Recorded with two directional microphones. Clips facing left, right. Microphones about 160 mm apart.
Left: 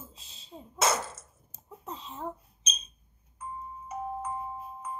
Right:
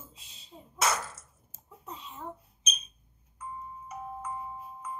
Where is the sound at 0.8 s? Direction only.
25° left (ahead or behind).